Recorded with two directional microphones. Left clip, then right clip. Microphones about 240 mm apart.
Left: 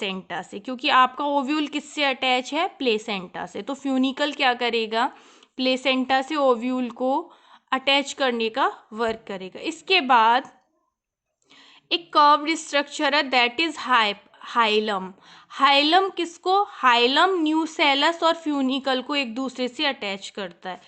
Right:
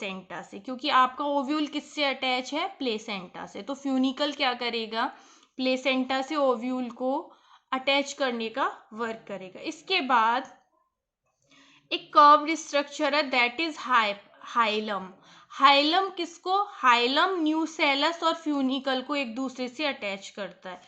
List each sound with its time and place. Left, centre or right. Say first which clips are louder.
0.0 s a woman's voice: left 7 dB; left
11.9 s a woman's voice: left 1 dB; left